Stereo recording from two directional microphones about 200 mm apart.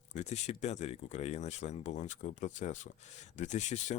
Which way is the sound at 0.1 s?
35° left (ahead or behind).